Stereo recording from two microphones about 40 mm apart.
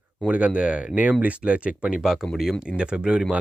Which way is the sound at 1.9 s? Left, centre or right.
Centre.